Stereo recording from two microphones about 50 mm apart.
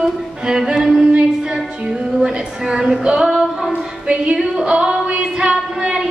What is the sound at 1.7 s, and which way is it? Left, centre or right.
Female singing, centre.